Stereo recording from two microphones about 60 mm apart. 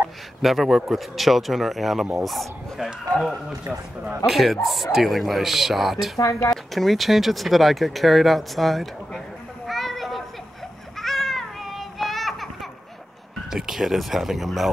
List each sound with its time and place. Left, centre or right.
0.4 s speech: centre
6.1 s speech: left
6.5 s speech: centre
9.7 s a sound: centre
13.5 s speech: centre